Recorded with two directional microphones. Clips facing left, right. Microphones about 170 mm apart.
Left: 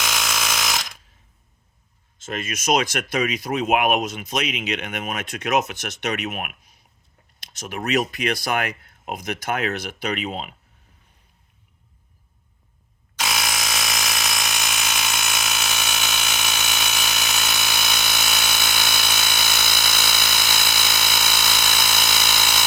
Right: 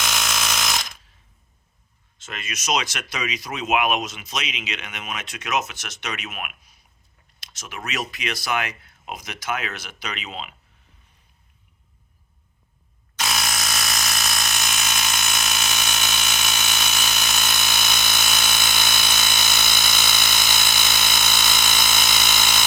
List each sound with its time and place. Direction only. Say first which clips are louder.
0.0 s a sound: even; 5° left (ahead or behind)
2.2 s speech: left 5 dB; 45° left (ahead or behind)
7.9 s speech: left 7 dB; 50° left (ahead or behind)
13.1 s alarm: left 1 dB; 10° left (ahead or behind)